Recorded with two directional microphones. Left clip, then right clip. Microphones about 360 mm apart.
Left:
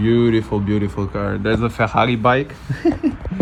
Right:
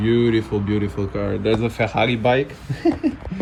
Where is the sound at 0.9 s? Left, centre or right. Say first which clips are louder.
Left 1 dB; left.